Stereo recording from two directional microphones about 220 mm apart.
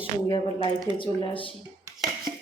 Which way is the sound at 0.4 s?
25° right (ahead or behind).